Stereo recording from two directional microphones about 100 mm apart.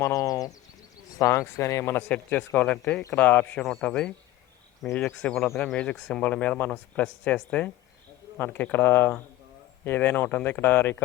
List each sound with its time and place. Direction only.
0.0 s speech: 30° left (ahead or behind); by 3.6 s 15° left (ahead or behind)
3.6 s speech: 5° left (ahead or behind); by 10.9 s 20° left (ahead or behind)